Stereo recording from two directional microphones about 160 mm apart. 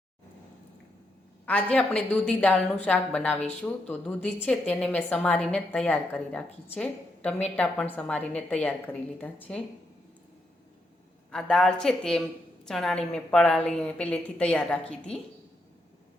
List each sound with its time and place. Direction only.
1.5 s a woman's voice: 5° left (ahead or behind)
11.3 s a woman's voice: 5° left (ahead or behind)